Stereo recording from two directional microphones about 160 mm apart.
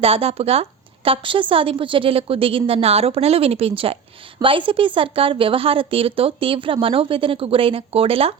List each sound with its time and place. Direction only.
0.0 s a woman's voice: 35° right (ahead or behind)